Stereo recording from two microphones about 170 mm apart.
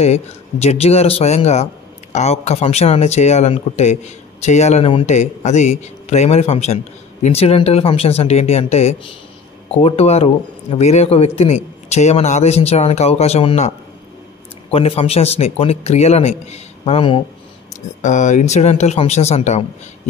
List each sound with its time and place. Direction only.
0.0 s speech: 40° left (ahead or behind)
18.0 s speech: 45° left (ahead or behind)